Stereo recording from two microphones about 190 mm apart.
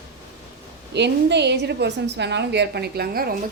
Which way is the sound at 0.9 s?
65° right (ahead or behind).